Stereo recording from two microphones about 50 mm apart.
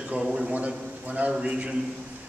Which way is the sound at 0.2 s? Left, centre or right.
Centre.